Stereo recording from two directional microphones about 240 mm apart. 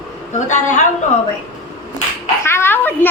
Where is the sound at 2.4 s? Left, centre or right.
Centre.